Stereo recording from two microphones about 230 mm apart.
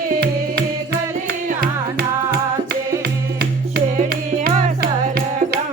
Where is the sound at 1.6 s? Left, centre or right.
Right.